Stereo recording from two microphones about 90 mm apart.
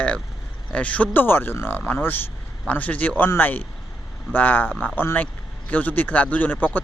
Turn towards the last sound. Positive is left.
turn(degrees=20)  # may be behind; listen again after turning